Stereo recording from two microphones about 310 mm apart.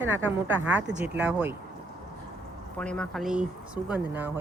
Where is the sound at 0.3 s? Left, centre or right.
Centre.